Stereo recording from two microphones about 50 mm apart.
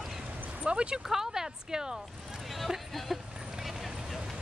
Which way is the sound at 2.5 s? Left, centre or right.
Centre.